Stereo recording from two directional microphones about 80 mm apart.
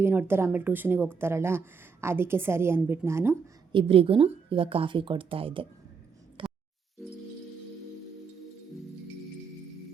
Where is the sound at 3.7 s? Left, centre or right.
Right.